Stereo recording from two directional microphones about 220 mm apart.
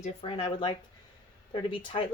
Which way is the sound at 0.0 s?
25° left (ahead or behind).